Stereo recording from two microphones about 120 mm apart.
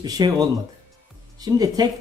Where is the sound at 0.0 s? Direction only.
30° right (ahead or behind).